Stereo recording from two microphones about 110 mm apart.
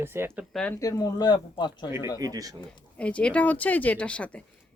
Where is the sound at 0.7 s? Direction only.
30° left (ahead or behind).